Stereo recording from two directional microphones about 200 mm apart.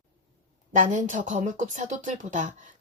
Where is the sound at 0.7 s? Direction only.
40° right (ahead or behind).